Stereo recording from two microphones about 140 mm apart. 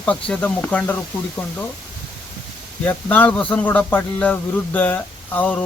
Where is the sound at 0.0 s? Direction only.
10° left (ahead or behind).